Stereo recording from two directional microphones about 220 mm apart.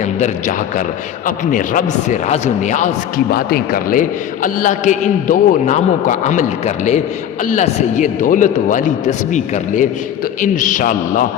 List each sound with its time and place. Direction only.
1.5 s a man's voice: 35° left (ahead or behind)